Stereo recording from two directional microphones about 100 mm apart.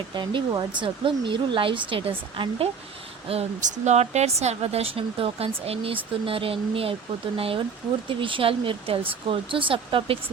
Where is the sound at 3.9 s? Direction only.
90° right.